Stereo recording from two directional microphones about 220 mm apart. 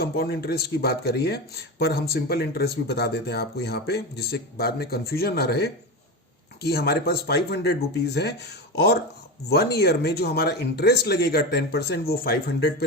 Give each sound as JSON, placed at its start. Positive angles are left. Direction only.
{"t": 0.0, "sound": "speech", "side_deg": 45}